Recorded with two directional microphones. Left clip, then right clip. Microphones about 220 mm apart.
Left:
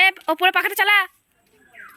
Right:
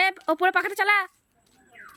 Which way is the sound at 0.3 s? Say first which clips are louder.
Left 4 dB; 10° right (ahead or behind).